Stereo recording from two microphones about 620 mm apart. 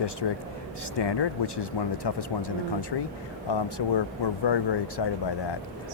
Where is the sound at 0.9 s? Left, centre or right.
Left.